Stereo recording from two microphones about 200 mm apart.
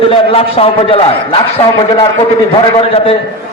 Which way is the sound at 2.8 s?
30° left (ahead or behind).